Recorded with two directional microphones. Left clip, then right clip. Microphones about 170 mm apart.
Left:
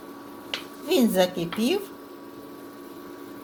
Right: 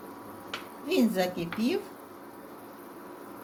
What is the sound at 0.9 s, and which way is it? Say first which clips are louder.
Speech: left 6 dB; 40° left (ahead or behind).